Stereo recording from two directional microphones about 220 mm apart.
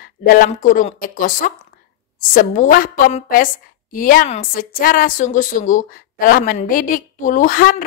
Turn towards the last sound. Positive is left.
turn(degrees=40)  # may be behind; listen again after turning